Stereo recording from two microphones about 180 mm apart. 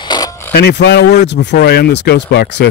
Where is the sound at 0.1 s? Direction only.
25° left (ahead or behind).